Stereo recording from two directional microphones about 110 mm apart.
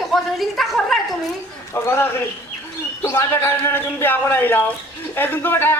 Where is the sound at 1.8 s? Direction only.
20° left (ahead or behind).